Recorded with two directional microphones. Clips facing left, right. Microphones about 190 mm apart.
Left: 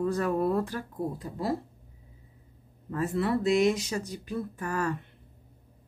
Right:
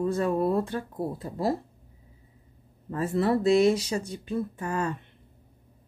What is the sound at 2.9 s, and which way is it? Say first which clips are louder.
Speech: right 3 dB; 35° right (ahead or behind).